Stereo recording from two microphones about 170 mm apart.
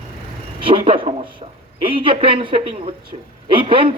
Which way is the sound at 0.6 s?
30° right (ahead or behind).